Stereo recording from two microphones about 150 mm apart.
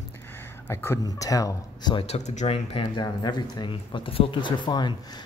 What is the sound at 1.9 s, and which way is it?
Speech, 45° left (ahead or behind).